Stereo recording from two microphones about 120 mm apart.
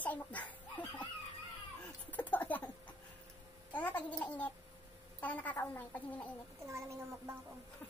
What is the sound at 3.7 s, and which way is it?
Babbling, 10° left (ahead or behind).